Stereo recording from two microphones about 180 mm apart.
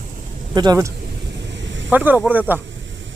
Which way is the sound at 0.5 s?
20° right (ahead or behind).